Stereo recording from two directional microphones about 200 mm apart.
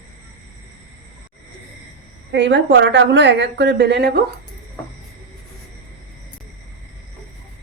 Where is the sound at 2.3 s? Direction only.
60° right (ahead or behind).